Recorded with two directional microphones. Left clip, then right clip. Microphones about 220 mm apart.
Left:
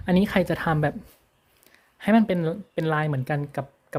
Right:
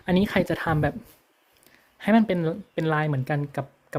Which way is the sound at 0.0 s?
5° left (ahead or behind).